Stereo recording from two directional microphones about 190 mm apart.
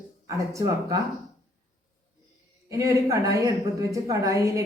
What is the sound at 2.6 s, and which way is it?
A woman's voice, 15° right (ahead or behind).